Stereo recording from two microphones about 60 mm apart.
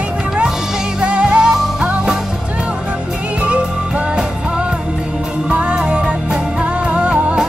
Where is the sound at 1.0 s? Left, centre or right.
Centre.